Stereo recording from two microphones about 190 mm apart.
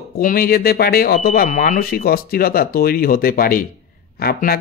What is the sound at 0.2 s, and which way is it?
Speech, 50° left (ahead or behind).